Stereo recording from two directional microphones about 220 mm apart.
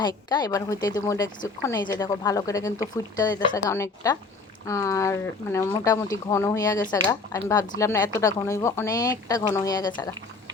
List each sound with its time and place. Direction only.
0.0 s speech: 20° left (ahead or behind)